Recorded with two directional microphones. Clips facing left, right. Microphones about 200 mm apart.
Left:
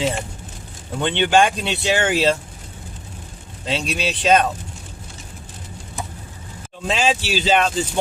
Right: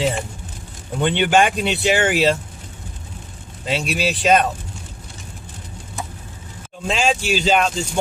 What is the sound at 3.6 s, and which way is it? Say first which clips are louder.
Speech: right 2 dB; 5° right (ahead or behind).